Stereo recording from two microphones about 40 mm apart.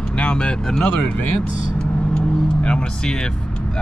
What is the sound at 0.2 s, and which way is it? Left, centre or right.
Speech, left.